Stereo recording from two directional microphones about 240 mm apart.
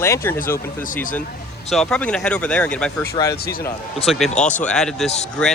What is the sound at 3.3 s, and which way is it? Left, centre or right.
Speech, left.